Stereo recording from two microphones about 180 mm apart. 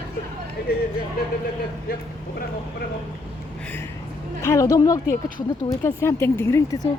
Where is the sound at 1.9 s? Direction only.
60° left (ahead or behind).